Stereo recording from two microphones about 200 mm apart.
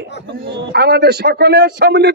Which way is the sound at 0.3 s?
60° right (ahead or behind).